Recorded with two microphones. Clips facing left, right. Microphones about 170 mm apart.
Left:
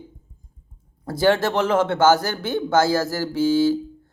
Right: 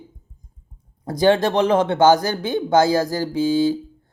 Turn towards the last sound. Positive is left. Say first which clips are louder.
# even
turn(degrees=-15)  # may be behind; listen again after turning